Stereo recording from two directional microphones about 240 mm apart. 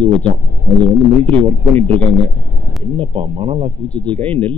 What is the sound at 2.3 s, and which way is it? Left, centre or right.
Speech, right.